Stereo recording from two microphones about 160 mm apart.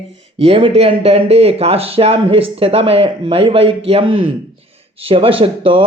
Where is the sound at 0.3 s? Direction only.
35° right (ahead or behind).